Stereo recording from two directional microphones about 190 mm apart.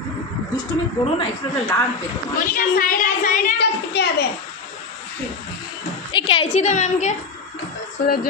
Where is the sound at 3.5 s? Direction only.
60° left (ahead or behind).